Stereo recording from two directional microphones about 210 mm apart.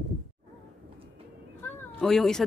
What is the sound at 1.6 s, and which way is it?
Cat, centre (ahead or behind).